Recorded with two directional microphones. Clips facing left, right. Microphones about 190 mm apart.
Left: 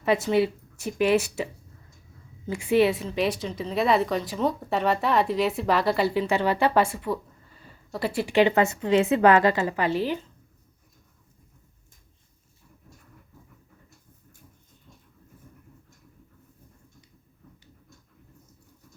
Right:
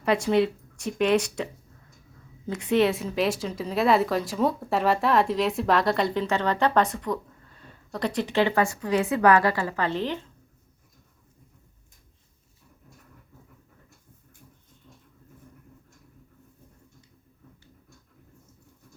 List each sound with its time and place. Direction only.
0.0 s speech: centre (ahead or behind)
2.5 s speech: 10° left (ahead or behind)